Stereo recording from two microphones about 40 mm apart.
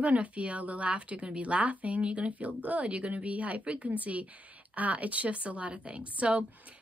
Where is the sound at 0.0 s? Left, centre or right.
Right.